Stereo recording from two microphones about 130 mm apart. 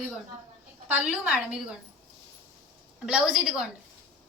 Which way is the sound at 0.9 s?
10° right (ahead or behind).